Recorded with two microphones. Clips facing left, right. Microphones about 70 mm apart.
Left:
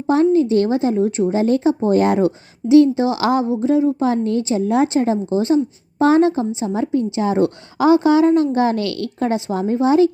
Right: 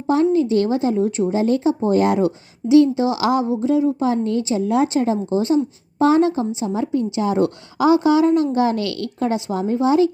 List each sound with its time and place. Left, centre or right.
0.1 s a woman's voice: left
1.3 s a woman's voice: left